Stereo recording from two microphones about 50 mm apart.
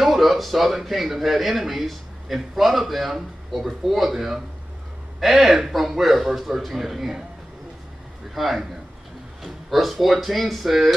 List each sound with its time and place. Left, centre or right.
0.0 s a man's voice: centre
8.4 s a man's voice: centre